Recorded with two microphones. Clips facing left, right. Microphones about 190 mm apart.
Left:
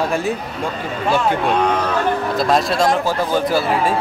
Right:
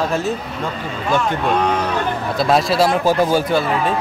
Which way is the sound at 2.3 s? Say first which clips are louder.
Right 4 dB; centre (ahead or behind).